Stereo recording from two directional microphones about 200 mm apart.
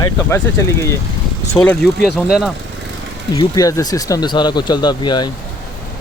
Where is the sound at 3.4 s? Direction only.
20° left (ahead or behind).